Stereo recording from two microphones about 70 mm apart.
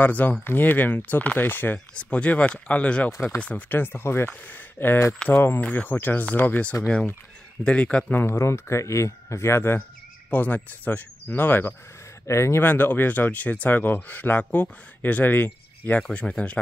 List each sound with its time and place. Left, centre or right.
0.0 s speech: left
2.0 s speech: centre
8.2 s speech: left
10.3 s speech: left
12.3 s speech: left
12.6 s speech: left
16.0 s speech: centre